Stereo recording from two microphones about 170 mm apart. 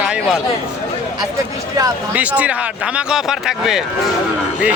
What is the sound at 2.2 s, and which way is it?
A man's voice, 10° right (ahead or behind).